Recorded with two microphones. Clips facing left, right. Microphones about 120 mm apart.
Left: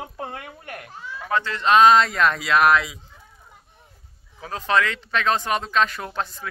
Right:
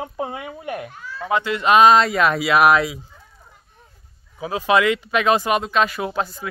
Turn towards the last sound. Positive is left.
turn(degrees=-5)  # may be behind; listen again after turning